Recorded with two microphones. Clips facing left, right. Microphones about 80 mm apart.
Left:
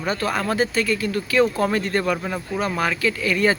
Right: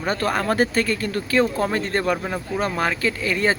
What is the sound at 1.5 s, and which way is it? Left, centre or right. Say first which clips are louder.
Speech: left 1 dB; right.